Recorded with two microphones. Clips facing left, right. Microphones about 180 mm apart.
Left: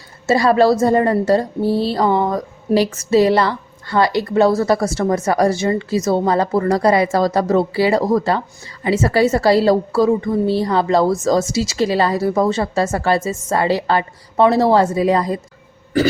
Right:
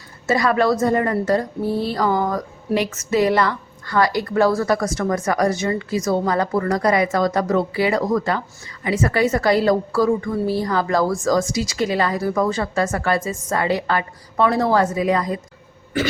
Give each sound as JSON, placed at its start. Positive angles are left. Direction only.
{"t": 0.3, "sound": "a woman's voice", "side_deg": 30}